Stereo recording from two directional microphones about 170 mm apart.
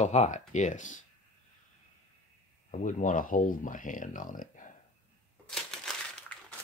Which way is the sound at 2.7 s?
45° left (ahead or behind).